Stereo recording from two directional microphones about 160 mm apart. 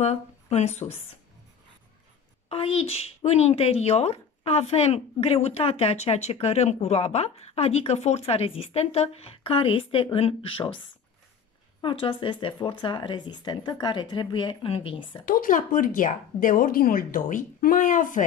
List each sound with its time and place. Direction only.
0.0 s speech: 45° left (ahead or behind)
2.5 s speech: 35° left (ahead or behind)
11.8 s speech: 30° left (ahead or behind)
15.2 s speech: 60° left (ahead or behind)